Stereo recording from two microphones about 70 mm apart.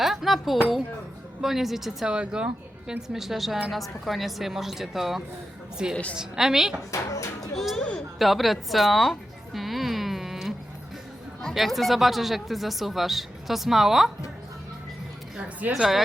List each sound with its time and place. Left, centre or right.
0.0 s a sound: centre
1.4 s speech: centre
2.1 s a woman's voice: centre
6.9 s speech: left
7.5 s speech: centre
7.8 s speech: centre
8.2 s music: centre
11.4 s speech: centre
15.7 s speech: centre